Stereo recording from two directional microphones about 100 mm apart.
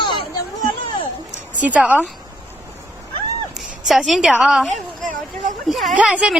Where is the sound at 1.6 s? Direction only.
15° right (ahead or behind).